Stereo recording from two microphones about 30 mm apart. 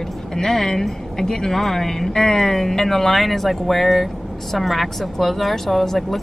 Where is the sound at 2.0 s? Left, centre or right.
Left.